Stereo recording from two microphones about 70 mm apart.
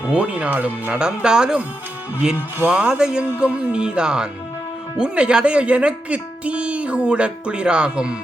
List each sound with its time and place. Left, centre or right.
0.1 s speech: centre
2.6 s speech: centre